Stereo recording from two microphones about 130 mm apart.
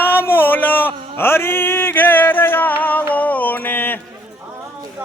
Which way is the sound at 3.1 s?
10° left (ahead or behind).